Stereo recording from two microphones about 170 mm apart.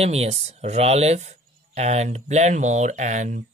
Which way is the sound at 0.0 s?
40° right (ahead or behind).